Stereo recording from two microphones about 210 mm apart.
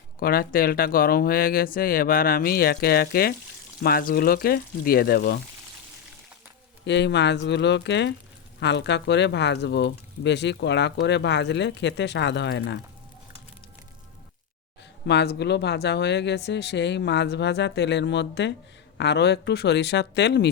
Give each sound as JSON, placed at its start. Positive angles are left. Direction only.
{"t": 0.2, "sound": "speech", "side_deg": 45}
{"t": 6.8, "sound": "speech", "side_deg": 55}
{"t": 15.0, "sound": "speech", "side_deg": 55}